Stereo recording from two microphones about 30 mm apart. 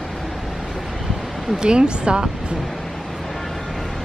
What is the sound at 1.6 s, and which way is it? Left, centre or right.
Speech, right.